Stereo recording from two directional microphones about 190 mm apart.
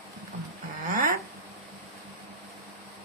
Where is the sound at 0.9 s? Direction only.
50° right (ahead or behind).